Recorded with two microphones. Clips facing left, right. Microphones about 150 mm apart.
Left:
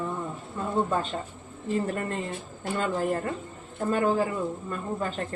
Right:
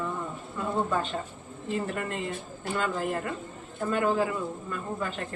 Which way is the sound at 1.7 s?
35° left (ahead or behind).